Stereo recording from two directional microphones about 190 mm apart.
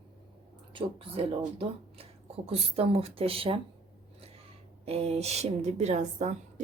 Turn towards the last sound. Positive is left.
turn(degrees=-35)  # may be behind; listen again after turning